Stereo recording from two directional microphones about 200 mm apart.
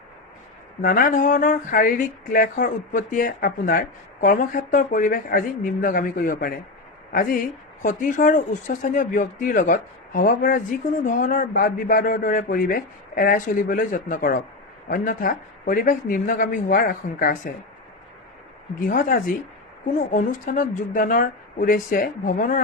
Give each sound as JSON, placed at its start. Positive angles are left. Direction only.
{"t": 0.8, "sound": "speech", "side_deg": 45}
{"t": 18.8, "sound": "speech", "side_deg": 45}